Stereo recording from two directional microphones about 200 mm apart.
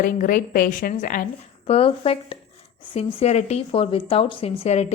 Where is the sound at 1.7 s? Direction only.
30° left (ahead or behind).